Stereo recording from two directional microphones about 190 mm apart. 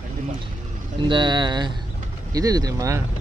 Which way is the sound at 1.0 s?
25° right (ahead or behind).